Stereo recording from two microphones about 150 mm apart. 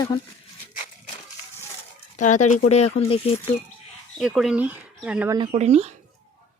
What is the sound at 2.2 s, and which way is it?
Speech, 55° left (ahead or behind).